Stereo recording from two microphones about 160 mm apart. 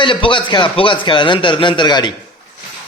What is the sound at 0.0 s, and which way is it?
A man's voice, 30° left (ahead or behind).